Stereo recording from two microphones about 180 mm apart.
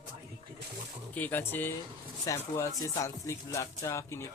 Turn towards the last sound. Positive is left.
turn(degrees=15)  # may be behind; listen again after turning